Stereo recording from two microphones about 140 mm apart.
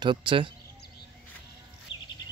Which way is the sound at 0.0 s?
35° right (ahead or behind).